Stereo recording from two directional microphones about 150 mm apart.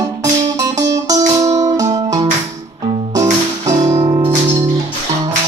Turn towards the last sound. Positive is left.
turn(degrees=-20)  # may be behind; listen again after turning